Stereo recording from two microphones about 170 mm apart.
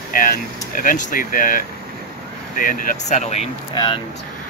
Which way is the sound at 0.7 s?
55° left (ahead or behind).